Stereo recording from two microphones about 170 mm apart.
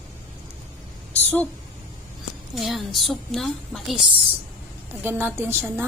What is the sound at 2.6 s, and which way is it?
A woman's voice, centre (ahead or behind).